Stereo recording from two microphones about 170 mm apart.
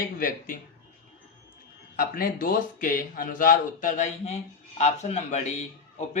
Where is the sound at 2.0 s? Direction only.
60° left (ahead or behind).